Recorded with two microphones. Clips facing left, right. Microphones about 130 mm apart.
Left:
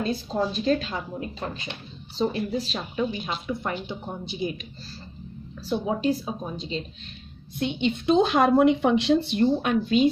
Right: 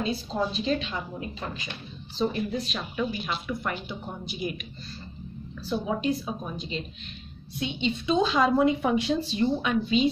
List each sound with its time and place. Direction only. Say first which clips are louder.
0.0 s a woman's voice: left 2 dB; 50° left (ahead or behind); by 6.9 s 30° left (ahead or behind)
7.5 s a woman's voice: left 3 dB; 55° left (ahead or behind)